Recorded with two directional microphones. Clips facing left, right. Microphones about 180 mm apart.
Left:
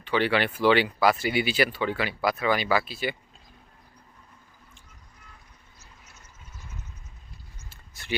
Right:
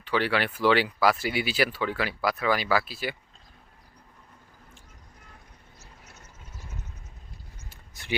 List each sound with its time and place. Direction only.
0.0 s speech: centre (ahead or behind)
5.8 s vehicle: 65° right (ahead or behind)
7.7 s a sound: 15° right (ahead or behind)